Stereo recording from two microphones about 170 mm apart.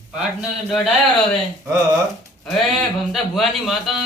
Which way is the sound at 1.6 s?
20° right (ahead or behind).